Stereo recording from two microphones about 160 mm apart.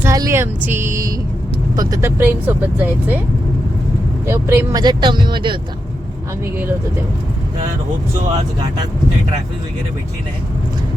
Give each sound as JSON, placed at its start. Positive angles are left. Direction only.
{"t": 0.0, "sound": "speech", "side_deg": -20}
{"t": 4.3, "sound": "speech", "side_deg": -15}
{"t": 4.8, "sound": "speech", "side_deg": -25}